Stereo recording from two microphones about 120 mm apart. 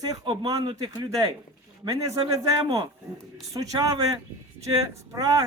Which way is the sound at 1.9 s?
30° right (ahead or behind).